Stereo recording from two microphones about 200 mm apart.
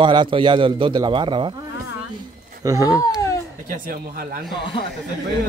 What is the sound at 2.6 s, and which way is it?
Speech, 15° right (ahead or behind).